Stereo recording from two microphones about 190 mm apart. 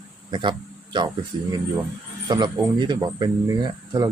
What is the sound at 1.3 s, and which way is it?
Speech, 20° right (ahead or behind).